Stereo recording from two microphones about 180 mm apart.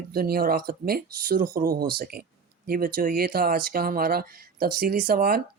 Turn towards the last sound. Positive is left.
turn(degrees=-55)  # may be behind; listen again after turning